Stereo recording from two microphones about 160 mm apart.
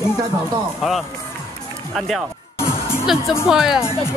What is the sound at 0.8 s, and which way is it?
Speech, centre (ahead or behind).